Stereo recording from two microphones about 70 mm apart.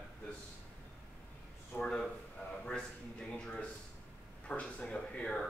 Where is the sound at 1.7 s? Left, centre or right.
Centre.